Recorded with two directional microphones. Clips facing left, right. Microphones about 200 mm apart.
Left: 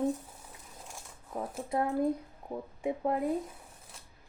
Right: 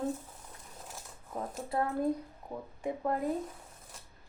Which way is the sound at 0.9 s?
5° left (ahead or behind).